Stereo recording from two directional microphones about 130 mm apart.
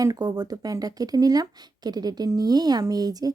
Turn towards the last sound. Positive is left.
turn(degrees=-30)  # may be behind; listen again after turning